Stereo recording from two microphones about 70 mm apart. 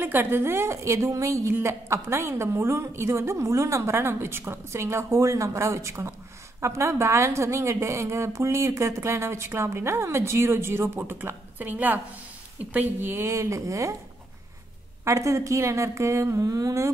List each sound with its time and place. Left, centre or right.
0.0 s a woman's voice: right
15.0 s a woman's voice: right
16.3 s a sound: right